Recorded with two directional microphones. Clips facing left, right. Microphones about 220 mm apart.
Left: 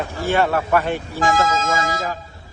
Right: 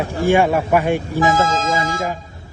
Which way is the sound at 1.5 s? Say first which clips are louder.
Right 1 dB; 25° right (ahead or behind).